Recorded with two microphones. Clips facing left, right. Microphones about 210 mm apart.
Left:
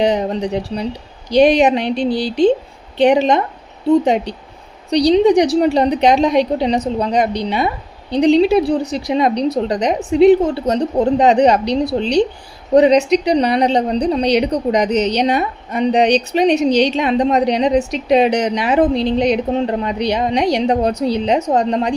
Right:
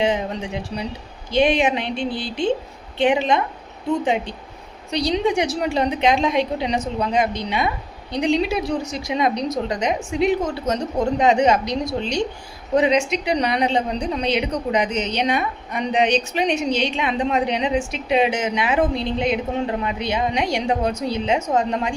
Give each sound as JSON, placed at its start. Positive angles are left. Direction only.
{"t": 0.0, "sound": "a woman's voice", "side_deg": 40}